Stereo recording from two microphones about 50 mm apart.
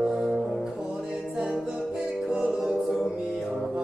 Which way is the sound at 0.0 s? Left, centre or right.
Centre.